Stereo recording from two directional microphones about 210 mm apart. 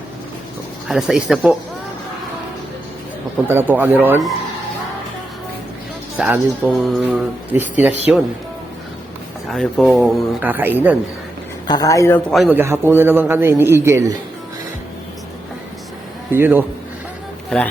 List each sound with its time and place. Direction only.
0.9 s speech: centre (ahead or behind)
3.4 s a man's voice: 10° right (ahead or behind)
6.1 s speech: 5° right (ahead or behind)
9.5 s speech: centre (ahead or behind)
11.7 s speech: 15° left (ahead or behind)
12.3 s a man's voice: 5° right (ahead or behind)
16.3 s a man's voice: 10° right (ahead or behind)
17.5 s speech: 5° left (ahead or behind)